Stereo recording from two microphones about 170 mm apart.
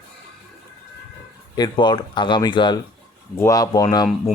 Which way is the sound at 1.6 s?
25° left (ahead or behind).